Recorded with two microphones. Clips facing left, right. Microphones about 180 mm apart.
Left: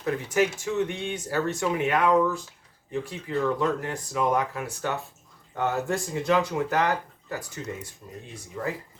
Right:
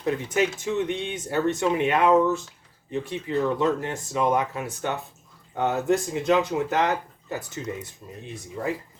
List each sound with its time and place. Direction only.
0.0 s speech: 20° right (ahead or behind)